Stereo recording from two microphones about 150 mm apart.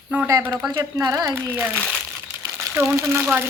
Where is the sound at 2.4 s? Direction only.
15° right (ahead or behind).